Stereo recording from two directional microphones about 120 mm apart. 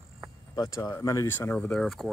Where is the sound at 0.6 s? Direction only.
30° left (ahead or behind).